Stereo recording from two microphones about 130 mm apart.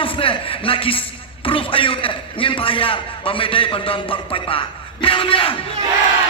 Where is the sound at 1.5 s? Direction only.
45° left (ahead or behind).